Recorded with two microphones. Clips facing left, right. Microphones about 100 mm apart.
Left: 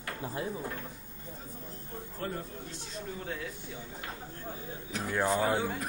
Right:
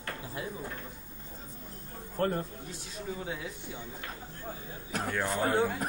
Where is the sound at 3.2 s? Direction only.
15° right (ahead or behind).